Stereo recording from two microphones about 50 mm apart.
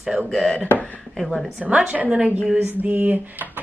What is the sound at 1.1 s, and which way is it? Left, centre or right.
Speech, centre.